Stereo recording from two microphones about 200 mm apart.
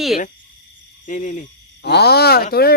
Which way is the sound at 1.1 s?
40° left (ahead or behind).